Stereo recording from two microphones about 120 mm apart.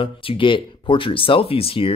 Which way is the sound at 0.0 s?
50° left (ahead or behind).